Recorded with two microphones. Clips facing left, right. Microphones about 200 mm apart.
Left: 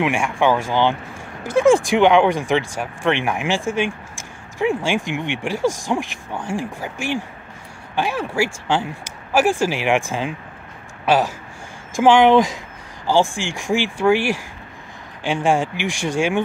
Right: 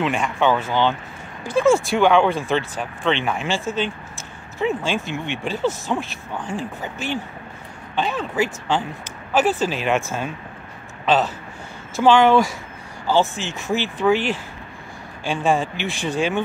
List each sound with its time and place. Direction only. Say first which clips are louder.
0.0 s speech: left 2 dB; 10° left (ahead or behind)